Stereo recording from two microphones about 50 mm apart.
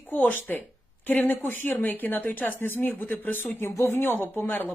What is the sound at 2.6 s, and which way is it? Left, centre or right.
A woman's voice, left.